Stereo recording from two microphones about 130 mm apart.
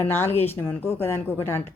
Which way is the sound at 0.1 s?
15° left (ahead or behind).